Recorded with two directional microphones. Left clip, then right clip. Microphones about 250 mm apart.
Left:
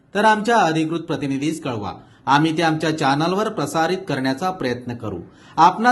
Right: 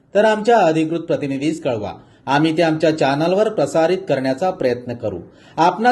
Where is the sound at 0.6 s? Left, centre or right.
Left.